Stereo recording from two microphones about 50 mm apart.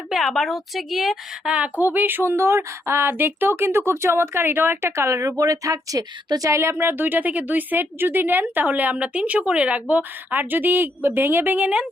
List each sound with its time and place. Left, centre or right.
0.3 s a woman's voice: centre
1.5 s speech: right
1.8 s a woman's voice: right
2.3 s speech: right
6.5 s speech: right
9.9 s a woman's voice: right
11.6 s speech: centre